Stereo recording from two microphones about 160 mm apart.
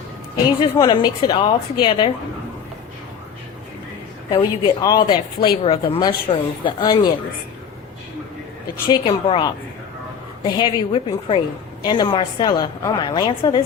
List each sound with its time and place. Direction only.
0.6 s speech: 30° left (ahead or behind)
4.4 s speech: 30° left (ahead or behind)
8.9 s a woman's voice: 30° left (ahead or behind)